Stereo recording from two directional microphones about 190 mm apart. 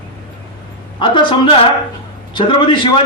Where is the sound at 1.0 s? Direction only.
25° left (ahead or behind).